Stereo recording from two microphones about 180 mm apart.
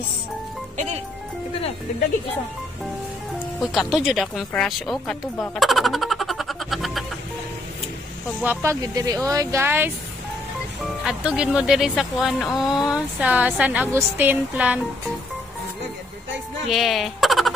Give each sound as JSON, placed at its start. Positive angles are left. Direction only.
{"t": 3.5, "sound": "speech", "side_deg": 0}
{"t": 8.4, "sound": "speech", "side_deg": -10}
{"t": 8.8, "sound": "speech", "side_deg": -20}
{"t": 11.1, "sound": "speech", "side_deg": -5}
{"t": 16.6, "sound": "speech", "side_deg": 0}